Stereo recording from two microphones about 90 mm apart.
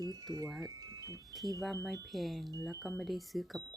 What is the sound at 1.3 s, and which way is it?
Speech, centre (ahead or behind).